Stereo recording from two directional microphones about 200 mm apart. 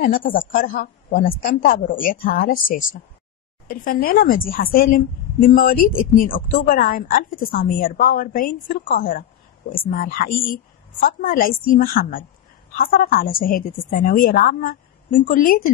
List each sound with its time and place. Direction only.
0.0 s a woman's voice: 45° left (ahead or behind)